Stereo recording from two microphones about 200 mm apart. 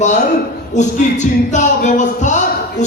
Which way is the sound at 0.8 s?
35° left (ahead or behind).